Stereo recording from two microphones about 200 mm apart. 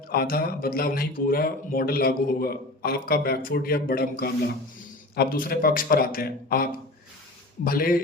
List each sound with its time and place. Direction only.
0.1 s speech: 50° left (ahead or behind)